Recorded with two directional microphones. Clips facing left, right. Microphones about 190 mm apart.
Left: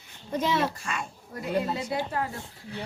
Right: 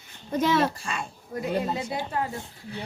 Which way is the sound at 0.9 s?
30° right (ahead or behind).